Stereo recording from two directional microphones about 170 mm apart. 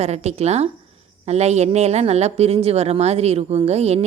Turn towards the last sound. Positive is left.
turn(degrees=-40)  # may be behind; listen again after turning